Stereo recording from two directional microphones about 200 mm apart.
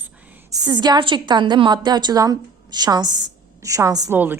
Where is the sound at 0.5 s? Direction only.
20° right (ahead or behind).